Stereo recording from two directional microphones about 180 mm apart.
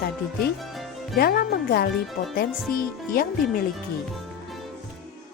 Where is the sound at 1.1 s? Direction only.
60° left (ahead or behind).